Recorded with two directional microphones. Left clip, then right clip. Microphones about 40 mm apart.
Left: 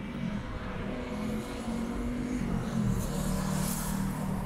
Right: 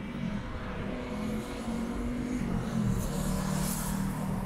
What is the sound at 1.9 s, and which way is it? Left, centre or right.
Vehicle, right.